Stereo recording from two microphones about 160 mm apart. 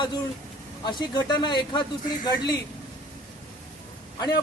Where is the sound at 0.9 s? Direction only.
30° left (ahead or behind).